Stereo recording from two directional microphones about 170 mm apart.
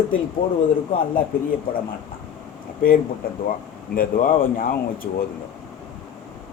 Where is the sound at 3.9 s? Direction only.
55° left (ahead or behind).